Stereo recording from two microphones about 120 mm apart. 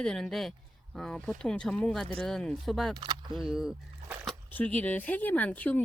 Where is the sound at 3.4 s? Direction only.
5° right (ahead or behind).